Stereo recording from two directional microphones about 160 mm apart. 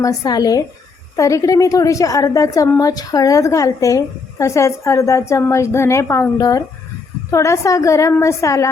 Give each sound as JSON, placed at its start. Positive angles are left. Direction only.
{"t": 0.0, "sound": "a woman's voice", "side_deg": 20}